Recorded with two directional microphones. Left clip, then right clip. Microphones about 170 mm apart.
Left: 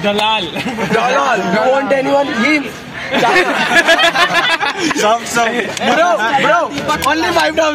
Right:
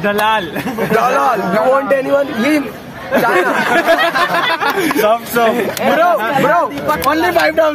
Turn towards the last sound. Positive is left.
turn(degrees=-25)  # may be behind; listen again after turning